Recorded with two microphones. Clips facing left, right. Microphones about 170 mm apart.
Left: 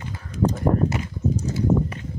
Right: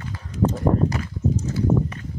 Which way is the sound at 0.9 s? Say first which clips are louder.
Even; 25° left (ahead or behind).